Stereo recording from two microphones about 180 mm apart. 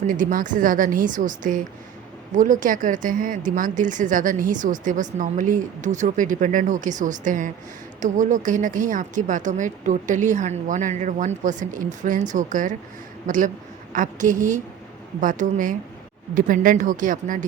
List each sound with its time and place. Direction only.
0.1 s a woman's voice: 50° right (ahead or behind)